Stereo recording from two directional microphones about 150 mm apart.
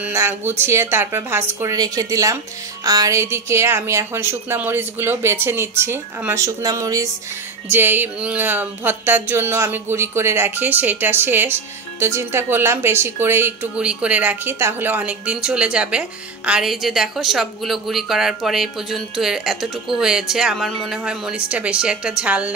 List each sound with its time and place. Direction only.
0.0 s a woman's voice: 15° right (ahead or behind)